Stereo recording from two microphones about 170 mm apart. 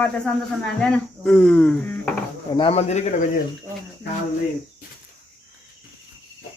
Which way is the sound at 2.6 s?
35° left (ahead or behind).